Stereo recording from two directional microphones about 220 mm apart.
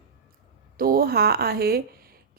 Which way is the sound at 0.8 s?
40° right (ahead or behind).